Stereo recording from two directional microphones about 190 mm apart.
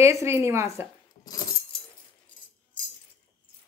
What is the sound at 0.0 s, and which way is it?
Speech, 15° right (ahead or behind).